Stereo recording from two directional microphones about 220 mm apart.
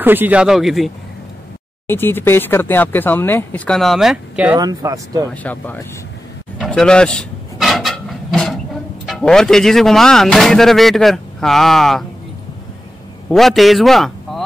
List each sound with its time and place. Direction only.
0.0 s speech: 10° right (ahead or behind)
1.9 s speech: 10° left (ahead or behind)
4.6 s speech: 15° right (ahead or behind)
5.3 s speech: 5° left (ahead or behind)
6.6 s a sound: 5° left (ahead or behind)
9.0 s speech: centre (ahead or behind)
13.3 s a man's voice: centre (ahead or behind)